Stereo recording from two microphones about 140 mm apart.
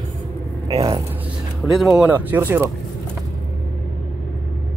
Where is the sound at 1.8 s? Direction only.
Centre (ahead or behind).